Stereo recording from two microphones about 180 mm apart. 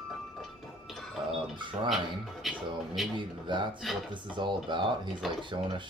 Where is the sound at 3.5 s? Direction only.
25° right (ahead or behind).